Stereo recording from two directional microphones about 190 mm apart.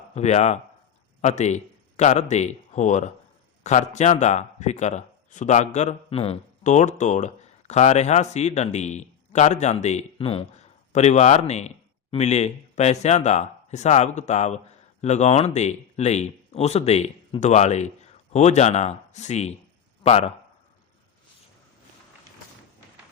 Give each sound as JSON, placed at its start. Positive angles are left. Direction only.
{"t": 0.1, "sound": "a man's voice", "side_deg": 35}